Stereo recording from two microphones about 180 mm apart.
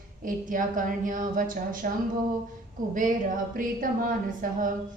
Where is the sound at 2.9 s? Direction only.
45° right (ahead or behind).